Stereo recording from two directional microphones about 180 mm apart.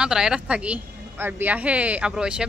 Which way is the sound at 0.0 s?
5° right (ahead or behind).